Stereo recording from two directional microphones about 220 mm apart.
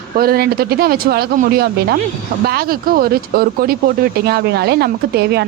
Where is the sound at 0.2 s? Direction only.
45° right (ahead or behind).